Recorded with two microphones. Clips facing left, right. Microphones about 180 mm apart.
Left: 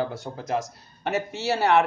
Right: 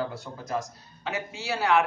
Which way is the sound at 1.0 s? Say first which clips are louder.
Left 7 dB; 70° left (ahead or behind).